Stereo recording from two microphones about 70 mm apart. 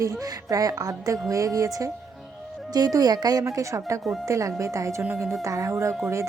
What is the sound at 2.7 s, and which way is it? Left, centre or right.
Speech, right.